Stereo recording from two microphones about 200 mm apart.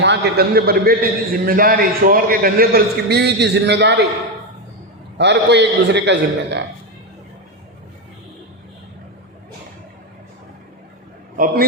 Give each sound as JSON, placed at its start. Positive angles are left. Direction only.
{"t": 0.0, "sound": "a man's voice", "side_deg": -55}
{"t": 5.1, "sound": "a man's voice", "side_deg": -60}